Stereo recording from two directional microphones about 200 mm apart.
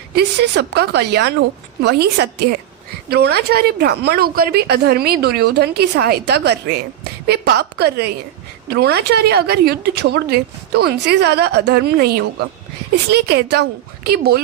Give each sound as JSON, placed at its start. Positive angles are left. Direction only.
{"t": 0.2, "sound": "a woman's voice", "side_deg": -55}